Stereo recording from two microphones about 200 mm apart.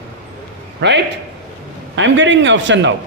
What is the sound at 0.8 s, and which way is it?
A man's voice, 60° right (ahead or behind).